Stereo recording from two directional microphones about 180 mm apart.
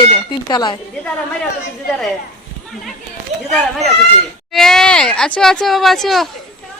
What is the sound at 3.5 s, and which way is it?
Speech, centre (ahead or behind).